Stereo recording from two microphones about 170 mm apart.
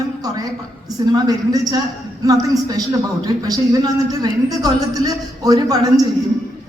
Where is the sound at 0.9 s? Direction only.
25° right (ahead or behind).